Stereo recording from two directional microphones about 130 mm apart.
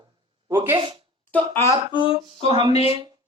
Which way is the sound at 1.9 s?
40° left (ahead or behind).